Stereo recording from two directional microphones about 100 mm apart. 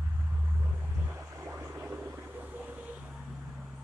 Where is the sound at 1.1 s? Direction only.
30° right (ahead or behind); by 3.6 s 10° right (ahead or behind).